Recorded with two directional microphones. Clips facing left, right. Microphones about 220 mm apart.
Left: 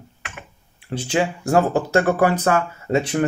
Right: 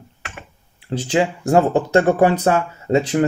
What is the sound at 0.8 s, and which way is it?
Speech, 20° right (ahead or behind).